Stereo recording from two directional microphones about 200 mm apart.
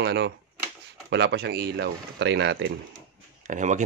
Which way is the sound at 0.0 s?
60° right (ahead or behind).